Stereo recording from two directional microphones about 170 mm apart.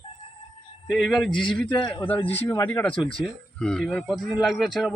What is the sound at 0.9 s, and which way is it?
Speech, centre (ahead or behind).